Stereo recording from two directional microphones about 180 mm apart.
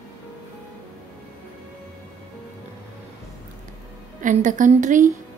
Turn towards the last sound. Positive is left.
turn(degrees=-45)  # may be behind; listen again after turning